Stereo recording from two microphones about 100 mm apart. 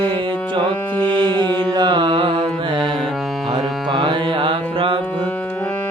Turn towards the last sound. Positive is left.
turn(degrees=-55)  # may be behind; listen again after turning